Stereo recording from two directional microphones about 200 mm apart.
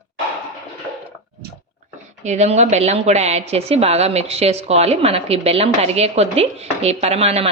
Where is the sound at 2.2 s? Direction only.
35° right (ahead or behind).